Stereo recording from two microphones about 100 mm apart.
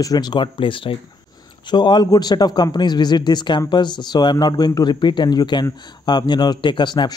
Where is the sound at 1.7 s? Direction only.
45° left (ahead or behind).